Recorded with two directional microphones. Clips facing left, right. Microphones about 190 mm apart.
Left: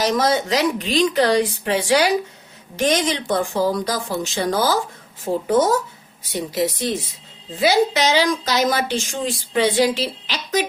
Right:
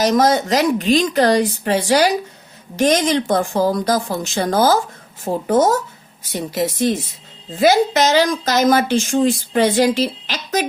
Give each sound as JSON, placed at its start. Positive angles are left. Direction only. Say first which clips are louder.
{"t": 0.0, "sound": "a woman's voice", "louder": "right 4 dB", "side_deg": -45}